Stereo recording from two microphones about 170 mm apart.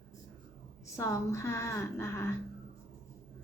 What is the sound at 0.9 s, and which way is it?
A woman's voice, 15° left (ahead or behind).